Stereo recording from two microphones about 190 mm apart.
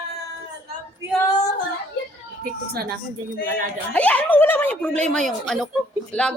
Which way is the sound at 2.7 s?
55° right (ahead or behind).